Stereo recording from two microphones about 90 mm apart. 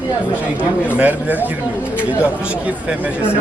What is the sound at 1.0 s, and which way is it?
Speech, 20° right (ahead or behind).